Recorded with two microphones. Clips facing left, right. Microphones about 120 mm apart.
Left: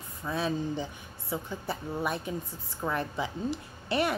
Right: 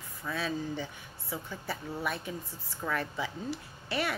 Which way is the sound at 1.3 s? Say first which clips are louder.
Left 4 dB; 20° left (ahead or behind).